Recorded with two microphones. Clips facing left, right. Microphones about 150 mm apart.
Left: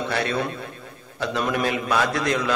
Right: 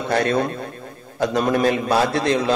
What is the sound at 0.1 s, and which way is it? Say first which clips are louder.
A man's voice: right 9 dB; 45° right (ahead or behind).